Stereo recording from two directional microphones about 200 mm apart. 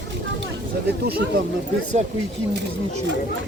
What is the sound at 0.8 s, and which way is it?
Speech, 50° right (ahead or behind).